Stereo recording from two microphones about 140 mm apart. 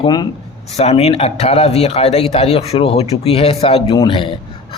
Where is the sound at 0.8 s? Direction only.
50° left (ahead or behind).